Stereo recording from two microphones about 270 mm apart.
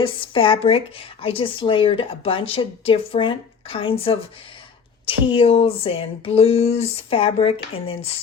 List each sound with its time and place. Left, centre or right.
0.0 s speech: centre